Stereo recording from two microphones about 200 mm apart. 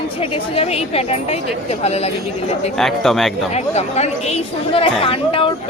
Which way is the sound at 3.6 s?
30° left (ahead or behind).